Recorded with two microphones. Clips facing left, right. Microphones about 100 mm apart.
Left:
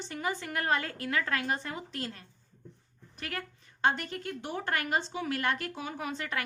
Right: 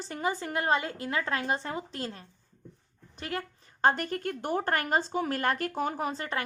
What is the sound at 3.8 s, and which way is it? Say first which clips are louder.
Speech: right 4 dB; 40° right (ahead or behind).